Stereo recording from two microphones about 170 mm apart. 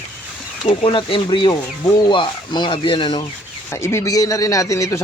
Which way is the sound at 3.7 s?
15° left (ahead or behind).